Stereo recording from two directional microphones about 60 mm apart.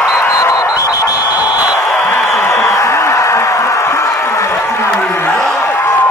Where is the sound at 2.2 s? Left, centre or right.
Left.